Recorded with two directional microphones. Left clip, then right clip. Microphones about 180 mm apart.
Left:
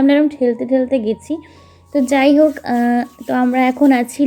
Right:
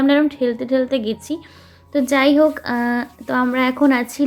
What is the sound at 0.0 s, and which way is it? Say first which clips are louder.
Speech: left 3 dB; 15° left (ahead or behind).